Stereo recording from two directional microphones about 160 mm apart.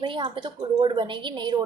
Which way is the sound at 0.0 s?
30° right (ahead or behind).